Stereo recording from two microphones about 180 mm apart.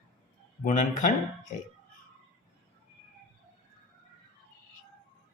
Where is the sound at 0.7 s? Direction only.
45° left (ahead or behind).